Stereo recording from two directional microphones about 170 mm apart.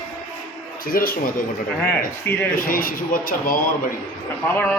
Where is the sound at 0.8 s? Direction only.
55° left (ahead or behind).